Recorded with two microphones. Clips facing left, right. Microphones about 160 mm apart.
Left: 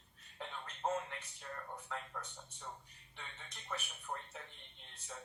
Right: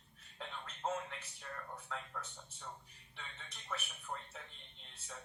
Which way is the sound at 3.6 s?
10° left (ahead or behind).